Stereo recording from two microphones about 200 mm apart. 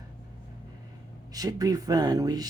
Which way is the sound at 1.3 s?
20° right (ahead or behind).